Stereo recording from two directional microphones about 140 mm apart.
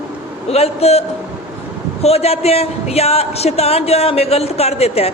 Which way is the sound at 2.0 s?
45° left (ahead or behind).